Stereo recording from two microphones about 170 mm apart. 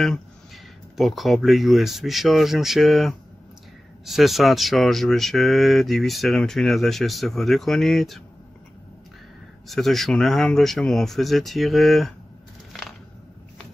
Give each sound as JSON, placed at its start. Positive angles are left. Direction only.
{"t": 0.9, "sound": "speech", "side_deg": 0}
{"t": 9.7, "sound": "speech", "side_deg": 0}